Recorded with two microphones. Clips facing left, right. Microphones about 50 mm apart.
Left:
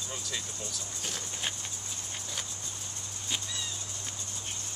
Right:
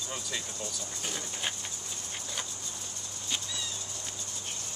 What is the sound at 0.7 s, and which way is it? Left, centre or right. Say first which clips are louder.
Speech: right 1 dB; centre.